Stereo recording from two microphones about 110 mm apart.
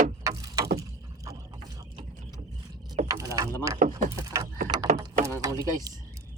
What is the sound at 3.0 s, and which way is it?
Mechanisms, 30° right (ahead or behind).